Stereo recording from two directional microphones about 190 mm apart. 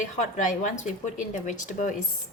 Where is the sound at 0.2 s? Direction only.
40° left (ahead or behind).